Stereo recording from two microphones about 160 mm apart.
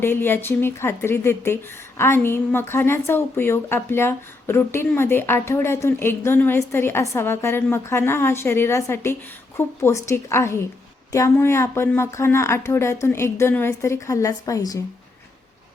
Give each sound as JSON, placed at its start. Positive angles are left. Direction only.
{"t": 0.0, "sound": "a woman's voice", "side_deg": 15}